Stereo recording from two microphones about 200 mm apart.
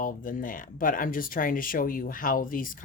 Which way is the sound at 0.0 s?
45° left (ahead or behind).